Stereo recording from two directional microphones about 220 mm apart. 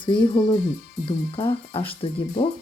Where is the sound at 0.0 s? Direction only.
20° left (ahead or behind).